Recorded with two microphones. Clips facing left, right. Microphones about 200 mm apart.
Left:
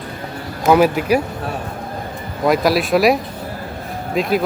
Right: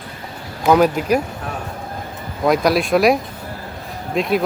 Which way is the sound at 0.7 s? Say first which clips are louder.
Left 1 dB; 5° left (ahead or behind).